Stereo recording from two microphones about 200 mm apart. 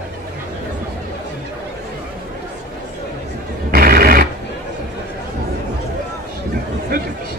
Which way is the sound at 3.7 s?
50° right (ahead or behind).